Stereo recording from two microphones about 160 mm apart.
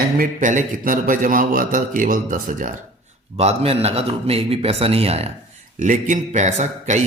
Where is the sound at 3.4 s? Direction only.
40° right (ahead or behind).